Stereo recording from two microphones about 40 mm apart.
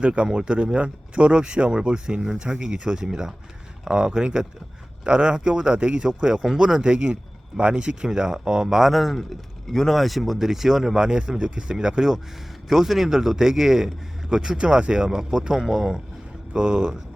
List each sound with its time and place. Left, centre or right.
0.0 s speech: right
8.9 s speech: centre
11.0 s a man's voice: right
16.5 s speech: right